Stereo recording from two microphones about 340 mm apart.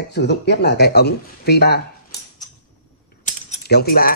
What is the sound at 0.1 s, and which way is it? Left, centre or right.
Cutlery, left.